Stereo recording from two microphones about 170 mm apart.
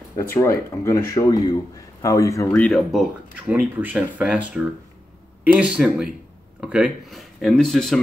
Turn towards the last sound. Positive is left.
turn(degrees=5)  # may be behind; listen again after turning